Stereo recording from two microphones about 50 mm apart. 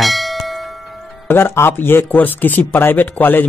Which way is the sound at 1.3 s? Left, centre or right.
Left.